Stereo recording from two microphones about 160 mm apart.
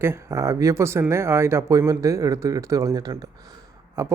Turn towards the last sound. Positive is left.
turn(degrees=-20)  # may be behind; listen again after turning